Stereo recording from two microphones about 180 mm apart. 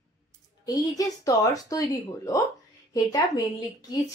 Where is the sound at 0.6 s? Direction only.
20° left (ahead or behind).